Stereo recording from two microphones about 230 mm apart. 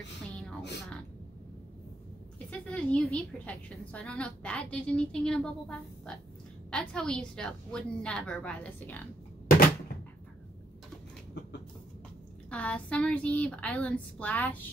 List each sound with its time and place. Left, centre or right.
0.3 s a sound: centre
0.6 s speech: left
2.3 s a woman's voice: centre
12.4 s a woman's voice: centre